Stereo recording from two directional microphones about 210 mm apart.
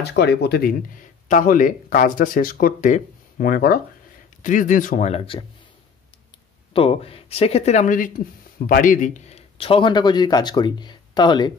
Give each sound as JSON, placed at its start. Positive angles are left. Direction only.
{"t": 0.0, "sound": "speech", "side_deg": 50}
{"t": 6.7, "sound": "a man's voice", "side_deg": 25}